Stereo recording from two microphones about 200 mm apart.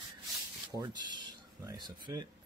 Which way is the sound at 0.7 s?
20° right (ahead or behind).